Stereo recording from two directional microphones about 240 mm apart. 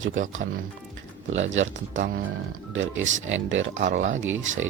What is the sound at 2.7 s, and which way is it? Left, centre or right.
Speech, right.